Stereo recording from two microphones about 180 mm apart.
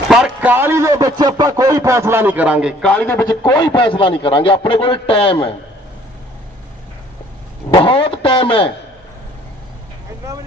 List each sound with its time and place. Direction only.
0.1 s a man's voice: 5° right (ahead or behind)
2.8 s a man's voice: 5° left (ahead or behind)
3.3 s a man's voice: 25° left (ahead or behind)
7.7 s a man's voice: 30° left (ahead or behind)